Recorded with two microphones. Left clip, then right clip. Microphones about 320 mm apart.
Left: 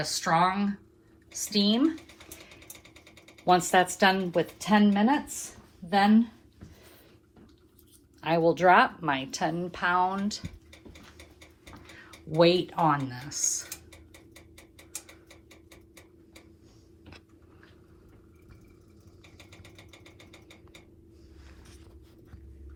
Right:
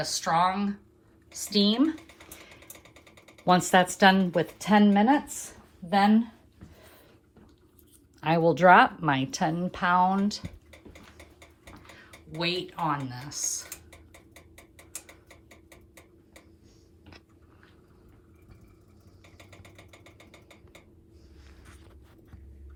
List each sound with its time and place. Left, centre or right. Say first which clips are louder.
0.0 s speech: even; centre
3.4 s a woman's voice: right 1 dB; right
8.2 s a woman's voice: right 2 dB; right
12.4 s speech: left 7 dB; centre
13.7 s tick-tock: left 1 dB; left